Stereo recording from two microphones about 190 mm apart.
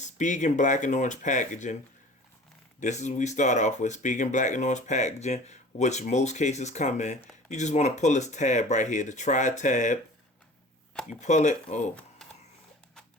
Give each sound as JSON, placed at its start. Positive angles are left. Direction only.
{"t": 0.0, "sound": "speech", "side_deg": 40}
{"t": 2.8, "sound": "speech", "side_deg": 40}
{"t": 11.2, "sound": "speech", "side_deg": 40}
{"t": 12.2, "sound": "a sound", "side_deg": 0}